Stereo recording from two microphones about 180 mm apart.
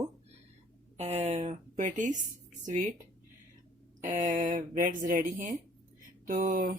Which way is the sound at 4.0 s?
50° right (ahead or behind).